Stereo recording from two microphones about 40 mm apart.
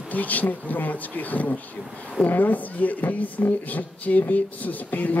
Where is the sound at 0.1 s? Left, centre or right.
Left.